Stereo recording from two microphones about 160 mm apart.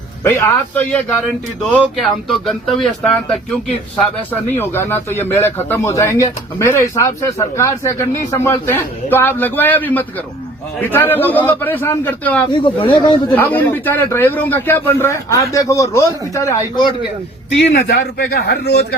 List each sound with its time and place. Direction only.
0.3 s a man's voice: 15° left (ahead or behind)
12.5 s speech: 30° left (ahead or behind)
13.3 s a man's voice: 10° left (ahead or behind)
17.7 s a man's voice: 85° left